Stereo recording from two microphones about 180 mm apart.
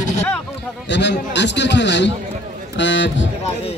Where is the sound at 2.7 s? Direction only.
85° left.